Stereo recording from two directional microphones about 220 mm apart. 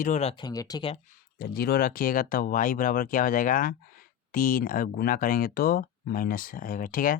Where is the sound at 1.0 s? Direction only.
40° left (ahead or behind).